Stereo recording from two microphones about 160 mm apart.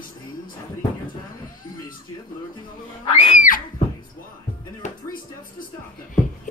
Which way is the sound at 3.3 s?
55° left (ahead or behind).